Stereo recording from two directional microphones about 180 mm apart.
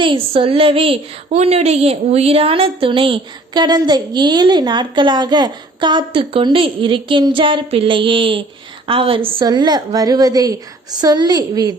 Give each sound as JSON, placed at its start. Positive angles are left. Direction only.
{"t": 0.0, "sound": "a woman's voice", "side_deg": -30}